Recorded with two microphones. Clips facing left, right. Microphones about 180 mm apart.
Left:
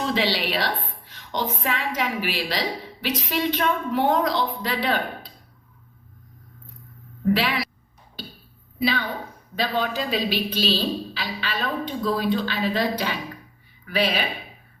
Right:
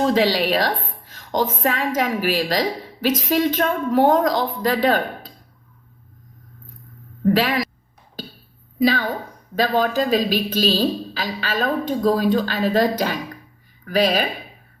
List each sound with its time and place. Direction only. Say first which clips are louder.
0.0 s a woman's voice: right 6 dB; 45° right (ahead or behind)
7.3 s speech: right 4 dB; 45° right (ahead or behind)
8.8 s a woman's voice: right 6 dB; 45° right (ahead or behind)